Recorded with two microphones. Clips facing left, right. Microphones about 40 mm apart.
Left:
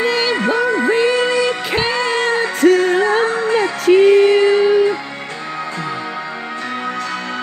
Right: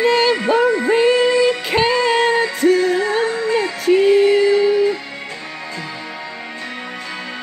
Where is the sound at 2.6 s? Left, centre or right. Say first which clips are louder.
Left 4 dB; left.